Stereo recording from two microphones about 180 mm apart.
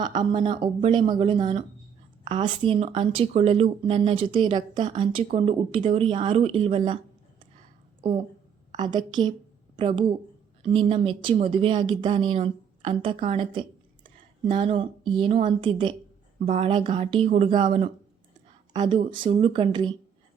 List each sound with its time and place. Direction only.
0.1 s speech: 25° right (ahead or behind)
8.7 s a woman's voice: 25° right (ahead or behind)
18.7 s speech: 25° right (ahead or behind)